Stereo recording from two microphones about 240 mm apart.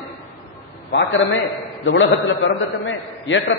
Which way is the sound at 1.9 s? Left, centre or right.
Left.